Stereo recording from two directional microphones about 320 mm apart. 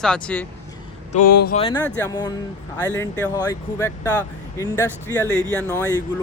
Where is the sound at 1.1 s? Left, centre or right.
Left.